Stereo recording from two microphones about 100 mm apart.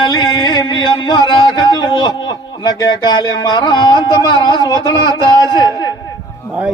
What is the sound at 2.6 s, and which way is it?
Speech, 45° left (ahead or behind).